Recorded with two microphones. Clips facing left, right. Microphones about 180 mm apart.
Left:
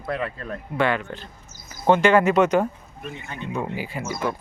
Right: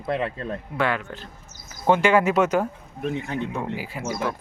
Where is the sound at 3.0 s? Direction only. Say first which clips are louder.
Right 8 dB; 90° right.